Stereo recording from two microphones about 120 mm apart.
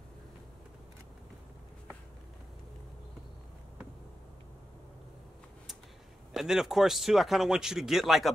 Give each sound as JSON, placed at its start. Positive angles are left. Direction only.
{"t": 6.3, "sound": "speech", "side_deg": -5}